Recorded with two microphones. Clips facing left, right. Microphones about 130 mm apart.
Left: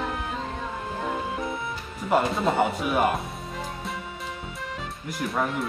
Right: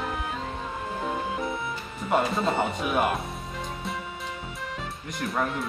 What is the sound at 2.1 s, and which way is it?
Speech, centre (ahead or behind).